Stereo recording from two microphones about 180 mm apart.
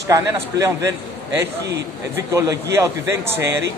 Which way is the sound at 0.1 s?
15° right (ahead or behind).